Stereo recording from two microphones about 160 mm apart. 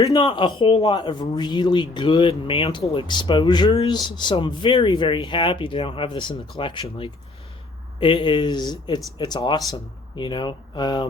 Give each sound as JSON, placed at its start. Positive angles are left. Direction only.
{"t": 0.0, "sound": "speech", "side_deg": 30}